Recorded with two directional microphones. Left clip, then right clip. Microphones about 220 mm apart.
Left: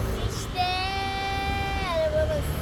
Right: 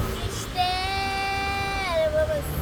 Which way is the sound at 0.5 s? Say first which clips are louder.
Right 2 dB; 5° right (ahead or behind).